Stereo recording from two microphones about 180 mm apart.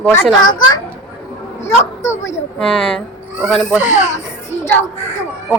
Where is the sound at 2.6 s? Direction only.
5° left (ahead or behind).